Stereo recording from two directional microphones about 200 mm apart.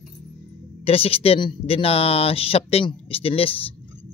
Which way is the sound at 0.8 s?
30° left (ahead or behind).